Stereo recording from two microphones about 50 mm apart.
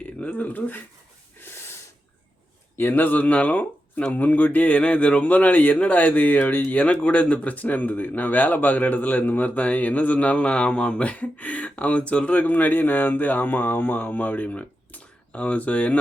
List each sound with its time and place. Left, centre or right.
0.3 s speech: left
1.4 s snort: left
2.7 s speech: left